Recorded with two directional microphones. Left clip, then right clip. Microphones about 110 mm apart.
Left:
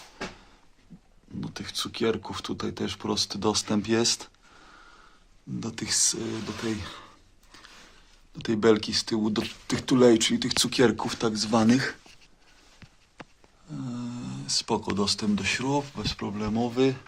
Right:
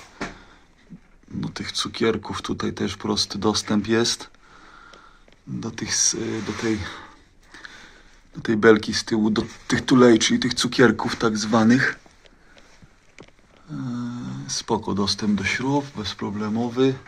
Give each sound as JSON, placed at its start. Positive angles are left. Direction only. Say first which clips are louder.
{"t": 1.4, "sound": "speech", "louder": "right 6 dB", "side_deg": 5}
{"t": 5.5, "sound": "speech", "louder": "right 3 dB", "side_deg": 20}
{"t": 5.8, "sound": "speech", "louder": "right 4 dB", "side_deg": 5}
{"t": 7.5, "sound": "a sound", "louder": "right 9 dB", "side_deg": 5}
{"t": 8.4, "sound": "speech", "louder": "right 6 dB", "side_deg": 5}
{"t": 13.7, "sound": "speech", "louder": "right 5 dB", "side_deg": 10}
{"t": 15.5, "sound": "speech", "louder": "right 4 dB", "side_deg": 20}